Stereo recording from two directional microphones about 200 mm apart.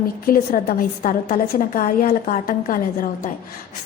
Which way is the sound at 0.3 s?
45° left (ahead or behind).